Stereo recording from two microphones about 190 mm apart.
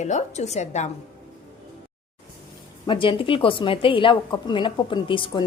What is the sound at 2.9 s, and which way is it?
A woman's voice, 25° left (ahead or behind).